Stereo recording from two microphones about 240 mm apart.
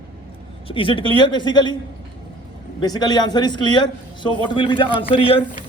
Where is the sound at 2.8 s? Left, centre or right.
Centre.